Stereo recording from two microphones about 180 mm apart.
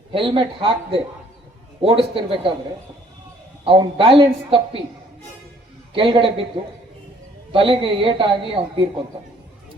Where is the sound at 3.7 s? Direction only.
30° right (ahead or behind).